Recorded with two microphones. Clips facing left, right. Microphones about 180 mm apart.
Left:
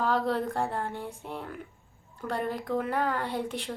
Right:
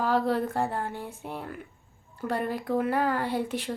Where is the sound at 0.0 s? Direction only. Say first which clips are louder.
Right 2 dB; 5° right (ahead or behind).